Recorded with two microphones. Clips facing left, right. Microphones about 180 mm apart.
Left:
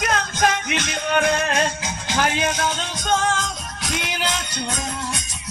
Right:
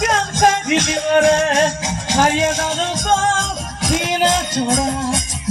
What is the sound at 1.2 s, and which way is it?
Music, 90° right.